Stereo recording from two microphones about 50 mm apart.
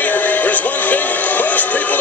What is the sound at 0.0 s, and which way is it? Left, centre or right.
Music, left.